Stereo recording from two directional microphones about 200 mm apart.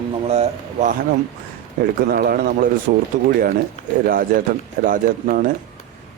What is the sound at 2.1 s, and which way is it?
Speech, 50° right (ahead or behind).